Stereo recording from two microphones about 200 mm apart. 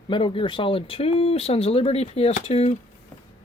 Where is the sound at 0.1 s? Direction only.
25° left (ahead or behind).